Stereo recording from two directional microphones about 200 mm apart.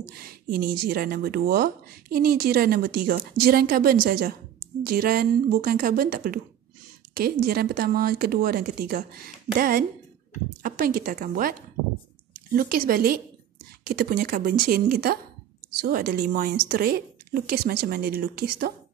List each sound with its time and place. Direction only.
0.1 s speech: 50° right (ahead or behind)